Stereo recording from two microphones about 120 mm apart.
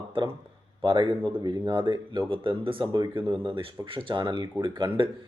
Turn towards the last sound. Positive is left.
turn(degrees=-45)  # may be behind; listen again after turning